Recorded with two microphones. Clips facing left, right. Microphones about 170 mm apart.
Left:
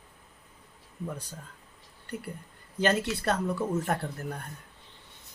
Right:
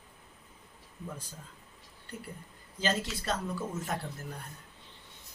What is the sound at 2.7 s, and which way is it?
Speech, 60° left (ahead or behind).